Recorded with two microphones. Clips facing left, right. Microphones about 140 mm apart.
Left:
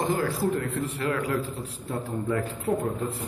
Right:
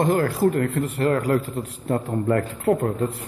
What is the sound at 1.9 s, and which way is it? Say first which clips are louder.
Speech: right 7 dB; 65° right (ahead or behind).